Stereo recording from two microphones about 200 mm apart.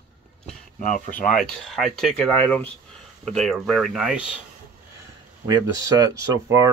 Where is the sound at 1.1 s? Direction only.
5° left (ahead or behind).